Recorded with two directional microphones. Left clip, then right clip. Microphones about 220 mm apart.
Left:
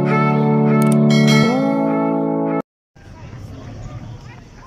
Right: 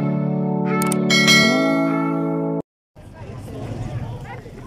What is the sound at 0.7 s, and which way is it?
Music, centre (ahead or behind).